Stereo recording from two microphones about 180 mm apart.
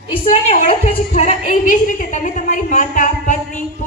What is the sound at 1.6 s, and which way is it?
A woman's voice, 45° left (ahead or behind).